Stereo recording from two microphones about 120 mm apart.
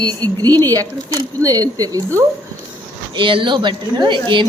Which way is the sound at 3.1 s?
45° right (ahead or behind).